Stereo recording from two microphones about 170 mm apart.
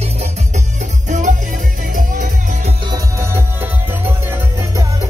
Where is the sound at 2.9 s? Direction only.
15° right (ahead or behind).